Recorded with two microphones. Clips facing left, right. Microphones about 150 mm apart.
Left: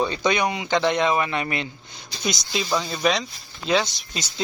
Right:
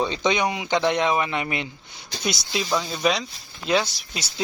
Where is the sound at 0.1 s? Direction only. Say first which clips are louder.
Even; 20° right (ahead or behind).